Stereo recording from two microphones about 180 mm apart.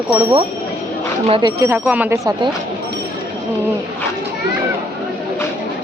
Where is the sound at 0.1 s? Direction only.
30° right (ahead or behind).